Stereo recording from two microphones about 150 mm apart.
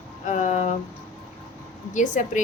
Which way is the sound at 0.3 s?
55° left (ahead or behind).